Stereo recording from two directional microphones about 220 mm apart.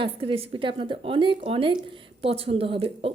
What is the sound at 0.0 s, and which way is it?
Speech, 25° right (ahead or behind).